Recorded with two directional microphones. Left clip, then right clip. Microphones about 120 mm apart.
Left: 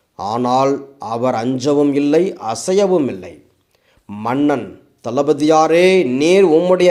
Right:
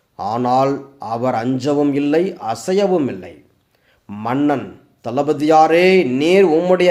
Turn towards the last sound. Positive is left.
turn(degrees=25)  # may be behind; listen again after turning